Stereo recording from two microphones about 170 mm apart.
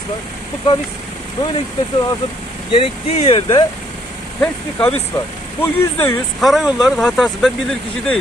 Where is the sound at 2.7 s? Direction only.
35° left (ahead or behind).